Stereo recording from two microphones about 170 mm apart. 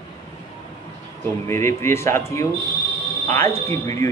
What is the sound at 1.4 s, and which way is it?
A man's voice, 15° left (ahead or behind).